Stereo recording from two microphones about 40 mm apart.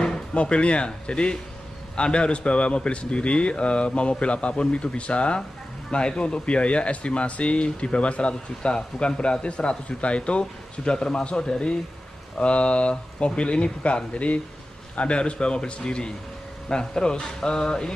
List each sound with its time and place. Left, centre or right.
0.0 s speech: left